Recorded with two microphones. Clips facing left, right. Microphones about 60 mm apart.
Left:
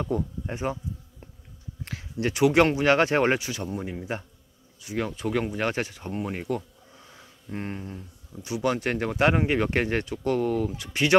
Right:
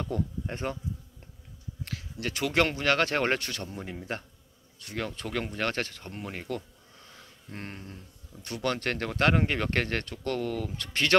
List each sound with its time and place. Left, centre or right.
0.0 s speech: centre
1.9 s speech: left